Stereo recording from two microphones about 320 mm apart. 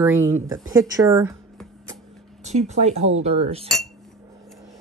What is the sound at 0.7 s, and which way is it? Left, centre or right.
Speech, centre.